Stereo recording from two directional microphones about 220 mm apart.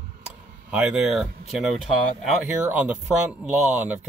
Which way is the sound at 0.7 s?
5° right (ahead or behind).